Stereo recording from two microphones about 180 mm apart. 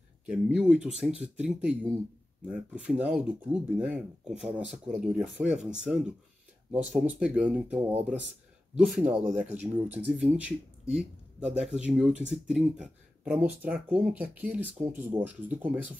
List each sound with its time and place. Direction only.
0.3 s speech: 5° right (ahead or behind)
9.0 s speech: 40° right (ahead or behind)
9.4 s speech: 10° right (ahead or behind)